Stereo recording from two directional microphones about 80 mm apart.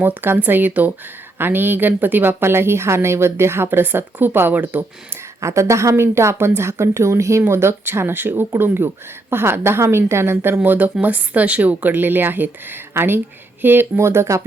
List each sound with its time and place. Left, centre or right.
0.0 s a woman's voice: right
5.4 s a woman's voice: right